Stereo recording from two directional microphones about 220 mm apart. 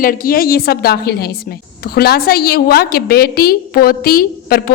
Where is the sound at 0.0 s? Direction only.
40° left (ahead or behind).